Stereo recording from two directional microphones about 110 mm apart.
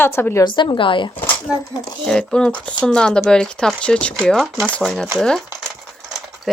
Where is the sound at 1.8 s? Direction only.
5° left (ahead or behind).